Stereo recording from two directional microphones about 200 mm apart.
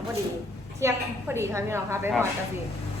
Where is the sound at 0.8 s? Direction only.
15° right (ahead or behind).